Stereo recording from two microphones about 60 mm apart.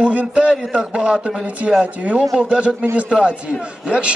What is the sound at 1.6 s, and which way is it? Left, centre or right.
A man's voice, right.